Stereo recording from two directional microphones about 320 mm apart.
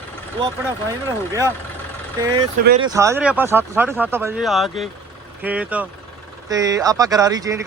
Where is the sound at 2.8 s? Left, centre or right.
Centre.